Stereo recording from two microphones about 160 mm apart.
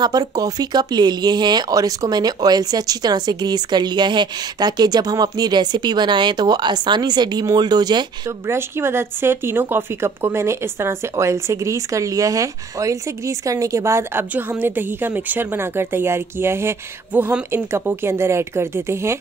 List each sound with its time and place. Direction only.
0.0 s speech: 25° right (ahead or behind)
8.5 s speech: 15° right (ahead or behind)